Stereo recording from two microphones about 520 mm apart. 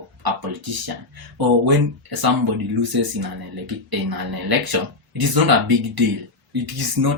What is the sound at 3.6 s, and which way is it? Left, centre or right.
Speech, right.